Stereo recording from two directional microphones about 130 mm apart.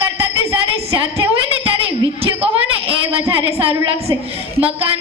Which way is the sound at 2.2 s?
45° right (ahead or behind).